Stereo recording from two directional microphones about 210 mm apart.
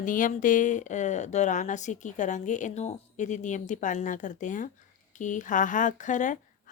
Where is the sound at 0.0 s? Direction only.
40° left (ahead or behind).